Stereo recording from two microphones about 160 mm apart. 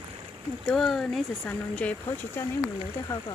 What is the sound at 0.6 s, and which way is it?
Speech, centre (ahead or behind).